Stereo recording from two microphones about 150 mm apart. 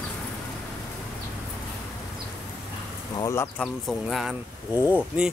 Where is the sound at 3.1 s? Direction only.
20° left (ahead or behind).